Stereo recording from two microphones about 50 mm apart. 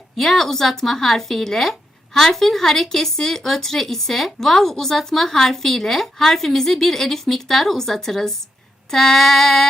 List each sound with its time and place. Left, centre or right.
0.2 s a woman's voice: centre